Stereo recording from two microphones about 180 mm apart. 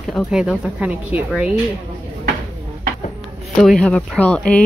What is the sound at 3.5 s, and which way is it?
Speech, 5° left (ahead or behind).